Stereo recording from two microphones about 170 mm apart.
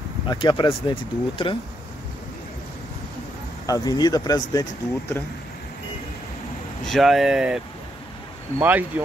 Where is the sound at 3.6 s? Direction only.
20° left (ahead or behind).